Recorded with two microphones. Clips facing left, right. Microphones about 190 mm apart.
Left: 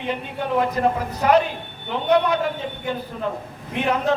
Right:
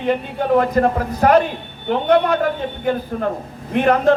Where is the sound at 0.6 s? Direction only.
50° right (ahead or behind).